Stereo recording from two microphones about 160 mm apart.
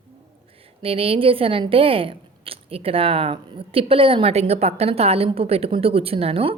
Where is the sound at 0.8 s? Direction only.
35° right (ahead or behind).